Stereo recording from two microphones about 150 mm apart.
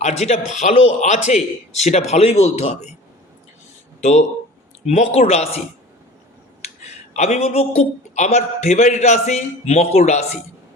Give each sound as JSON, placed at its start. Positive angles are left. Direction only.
{"t": 0.0, "sound": "a man's voice", "side_deg": 45}
{"t": 4.9, "sound": "a man's voice", "side_deg": 50}
{"t": 6.6, "sound": "a man's voice", "side_deg": 50}